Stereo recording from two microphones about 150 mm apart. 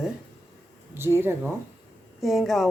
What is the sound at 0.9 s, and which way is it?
Speech, 15° right (ahead or behind).